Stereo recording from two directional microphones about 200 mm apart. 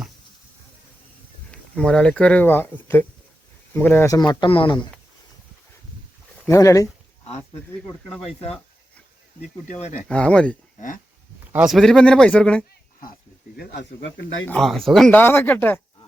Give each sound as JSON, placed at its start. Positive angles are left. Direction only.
{"t": 1.5, "sound": "speech", "side_deg": 5}
{"t": 4.3, "sound": "speech", "side_deg": 25}
{"t": 6.5, "sound": "speech", "side_deg": 15}
{"t": 8.3, "sound": "speech", "side_deg": 30}
{"t": 9.6, "sound": "speech", "side_deg": 35}
{"t": 10.1, "sound": "speech", "side_deg": 5}
{"t": 10.8, "sound": "speech", "side_deg": 40}
{"t": 11.5, "sound": "speech", "side_deg": 0}
{"t": 13.6, "sound": "speech", "side_deg": 55}
{"t": 14.4, "sound": "speech", "side_deg": 5}